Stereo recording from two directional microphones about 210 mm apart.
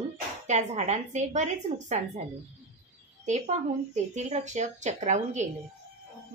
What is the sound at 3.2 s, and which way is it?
A woman's voice, 35° right (ahead or behind).